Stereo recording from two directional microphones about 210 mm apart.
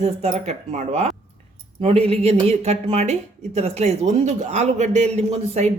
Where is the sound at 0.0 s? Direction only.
30° right (ahead or behind).